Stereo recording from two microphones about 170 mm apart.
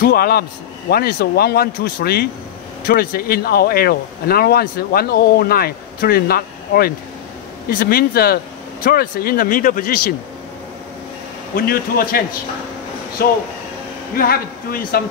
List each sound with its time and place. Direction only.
0.0 s speech: 65° left (ahead or behind)
11.5 s speech: 60° left (ahead or behind)